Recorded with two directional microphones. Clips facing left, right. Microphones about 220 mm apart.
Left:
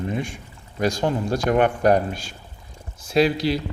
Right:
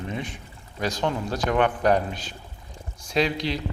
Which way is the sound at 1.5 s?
45° left (ahead or behind).